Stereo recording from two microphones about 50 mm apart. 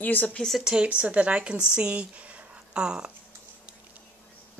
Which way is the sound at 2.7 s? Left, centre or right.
Centre.